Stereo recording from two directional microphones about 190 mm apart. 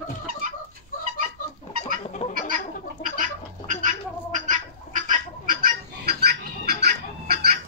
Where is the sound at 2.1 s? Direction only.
35° left (ahead or behind).